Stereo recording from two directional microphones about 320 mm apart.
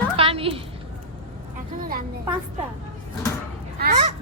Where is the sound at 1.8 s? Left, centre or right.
Right.